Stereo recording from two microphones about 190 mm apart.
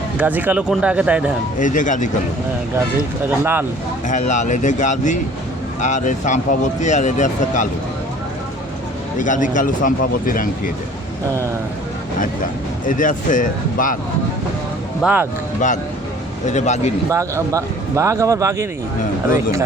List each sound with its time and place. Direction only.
0.2 s speech: 10° right (ahead or behind)
1.5 s speech: 40° left (ahead or behind)
3.2 s speech: 10° right (ahead or behind)
4.1 s speech: 40° left (ahead or behind)
9.1 s speech: 40° left (ahead or behind)
12.2 s speech: 45° left (ahead or behind)
15.0 s speech: 10° right (ahead or behind)
16.5 s speech: 40° left (ahead or behind)
17.1 s speech: 15° right (ahead or behind)